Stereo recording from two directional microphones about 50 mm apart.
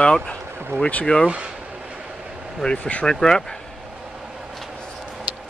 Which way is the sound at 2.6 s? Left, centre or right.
Centre.